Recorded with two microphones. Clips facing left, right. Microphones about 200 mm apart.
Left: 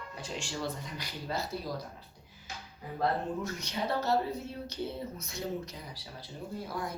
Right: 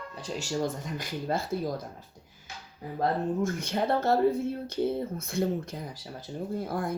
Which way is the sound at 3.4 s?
50° right (ahead or behind).